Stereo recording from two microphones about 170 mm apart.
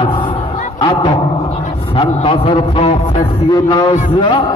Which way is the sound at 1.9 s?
30° left (ahead or behind).